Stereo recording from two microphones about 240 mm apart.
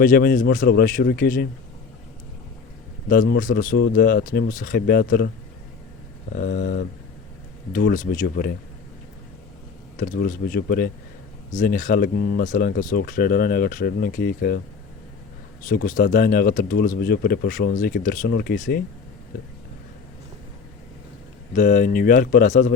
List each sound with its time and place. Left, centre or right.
0.0 s speech: left
3.1 s speech: left
6.3 s speech: left
10.0 s speech: left
15.7 s speech: left
21.5 s speech: left